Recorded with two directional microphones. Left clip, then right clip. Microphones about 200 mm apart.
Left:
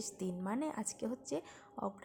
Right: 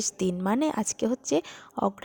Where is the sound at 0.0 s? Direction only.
35° right (ahead or behind).